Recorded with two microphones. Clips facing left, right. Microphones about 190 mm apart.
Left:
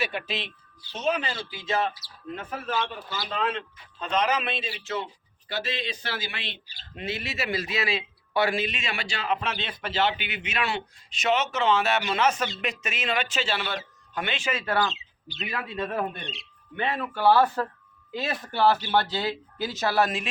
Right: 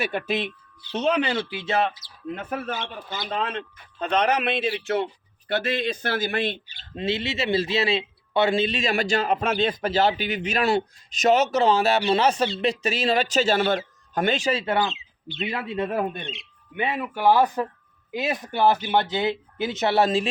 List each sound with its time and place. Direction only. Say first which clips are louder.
0.0 s speech: right 5 dB; 50° right (ahead or behind)
2.7 s speech: left 2 dB; 20° right (ahead or behind)
3.3 s speech: even; 55° right (ahead or behind)
6.9 s speech: right 6 dB; 25° right (ahead or behind)
14.6 s speech: right 2 dB; 20° right (ahead or behind)
15.8 s speech: right 4 dB; 10° right (ahead or behind)
16.2 s speech: right 3 dB; 35° left (ahead or behind)
16.7 s speech: right 2 dB; 15° right (ahead or behind); by 20.3 s 30° right (ahead or behind)